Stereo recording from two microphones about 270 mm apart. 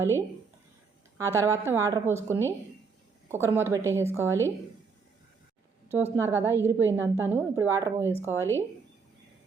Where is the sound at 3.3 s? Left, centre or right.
Centre.